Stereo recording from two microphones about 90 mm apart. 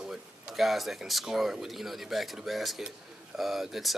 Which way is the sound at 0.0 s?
5° right (ahead or behind).